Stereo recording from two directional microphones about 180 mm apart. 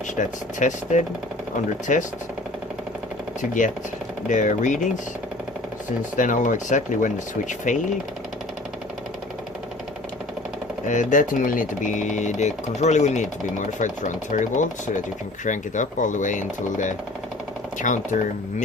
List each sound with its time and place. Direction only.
0.2 s speech: 45° left (ahead or behind)
4.3 s speech: 45° left (ahead or behind)
6.1 s speech: 45° left (ahead or behind)
10.8 s speech: 45° left (ahead or behind)